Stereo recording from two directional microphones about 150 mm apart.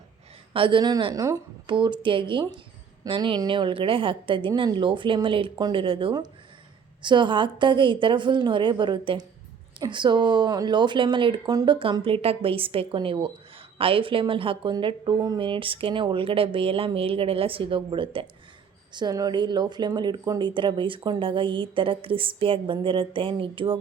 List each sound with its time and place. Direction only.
0.5 s a woman's voice: 35° right (ahead or behind)
1.6 s speech: 30° right (ahead or behind)